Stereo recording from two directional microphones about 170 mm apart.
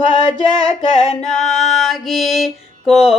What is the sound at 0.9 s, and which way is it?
Music, 45° left (ahead or behind).